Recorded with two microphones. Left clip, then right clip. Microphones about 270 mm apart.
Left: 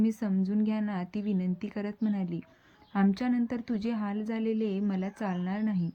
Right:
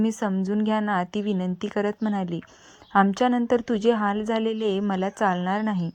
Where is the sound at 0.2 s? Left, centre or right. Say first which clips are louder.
Right 6 dB; right.